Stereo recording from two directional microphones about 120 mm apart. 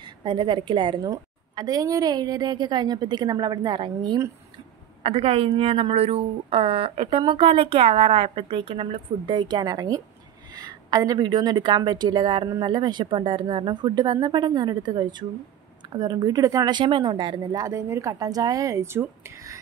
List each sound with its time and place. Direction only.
0.0 s a woman's voice: 40° right (ahead or behind)
5.0 s a woman's voice: 55° right (ahead or behind); by 19.6 s 25° right (ahead or behind)